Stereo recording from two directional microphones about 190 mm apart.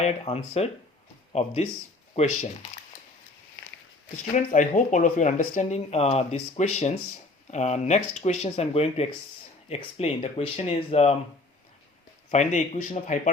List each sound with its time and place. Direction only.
0.0 s speech: 35° left (ahead or behind)
4.4 s speech: 40° left (ahead or behind)
12.3 s speech: 40° left (ahead or behind)